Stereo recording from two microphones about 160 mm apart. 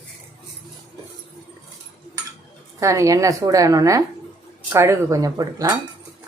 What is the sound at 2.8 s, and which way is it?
A woman's voice, 20° right (ahead or behind).